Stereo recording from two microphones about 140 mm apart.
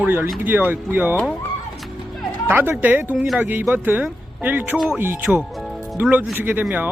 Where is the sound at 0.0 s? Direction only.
15° right (ahead or behind).